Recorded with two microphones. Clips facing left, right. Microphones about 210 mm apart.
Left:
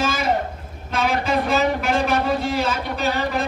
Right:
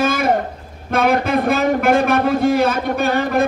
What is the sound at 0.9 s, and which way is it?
A man's voice, 55° right (ahead or behind).